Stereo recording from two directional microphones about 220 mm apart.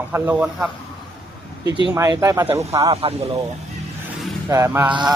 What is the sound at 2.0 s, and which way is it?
Speech, 15° right (ahead or behind).